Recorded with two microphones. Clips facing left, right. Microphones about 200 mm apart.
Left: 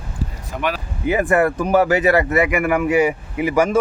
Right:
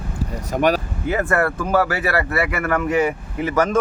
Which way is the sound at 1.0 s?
15° left (ahead or behind).